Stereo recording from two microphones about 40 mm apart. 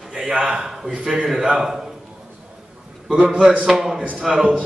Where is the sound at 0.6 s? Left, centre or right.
Centre.